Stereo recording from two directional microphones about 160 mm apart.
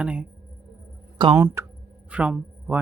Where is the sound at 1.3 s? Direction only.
15° right (ahead or behind).